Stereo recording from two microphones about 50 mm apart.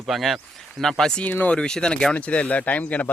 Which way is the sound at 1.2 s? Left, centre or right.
Left.